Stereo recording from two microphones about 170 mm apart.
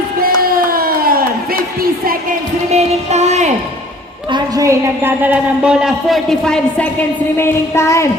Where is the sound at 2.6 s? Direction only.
40° right (ahead or behind).